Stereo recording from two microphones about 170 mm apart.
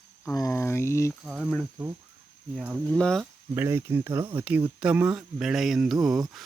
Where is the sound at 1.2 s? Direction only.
5° right (ahead or behind).